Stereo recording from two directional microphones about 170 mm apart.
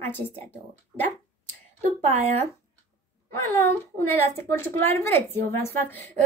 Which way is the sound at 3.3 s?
15° left (ahead or behind).